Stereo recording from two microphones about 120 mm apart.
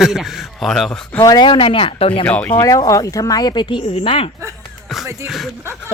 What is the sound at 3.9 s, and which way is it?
Speech, 50° left (ahead or behind).